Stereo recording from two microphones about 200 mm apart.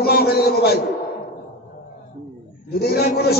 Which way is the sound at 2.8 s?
50° left (ahead or behind).